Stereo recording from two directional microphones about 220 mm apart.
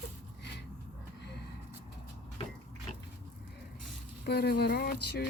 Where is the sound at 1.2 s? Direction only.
50° left (ahead or behind).